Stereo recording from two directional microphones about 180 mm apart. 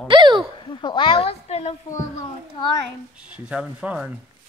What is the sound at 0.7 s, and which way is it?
A woman's voice, 25° left (ahead or behind).